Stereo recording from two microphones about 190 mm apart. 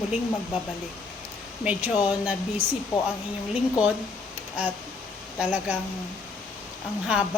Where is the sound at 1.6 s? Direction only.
5° right (ahead or behind).